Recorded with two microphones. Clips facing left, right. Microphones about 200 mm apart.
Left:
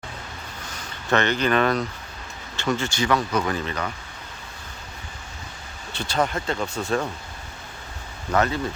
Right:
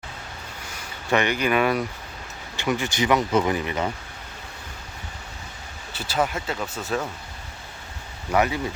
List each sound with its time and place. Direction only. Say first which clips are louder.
1.1 s speech: left 1 dB; 10° right (ahead or behind)
5.9 s speech: left 1 dB; 5° right (ahead or behind)
8.3 s speech: even; 10° right (ahead or behind)